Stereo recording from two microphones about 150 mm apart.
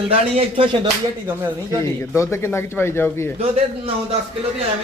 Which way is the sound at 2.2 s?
20° left (ahead or behind).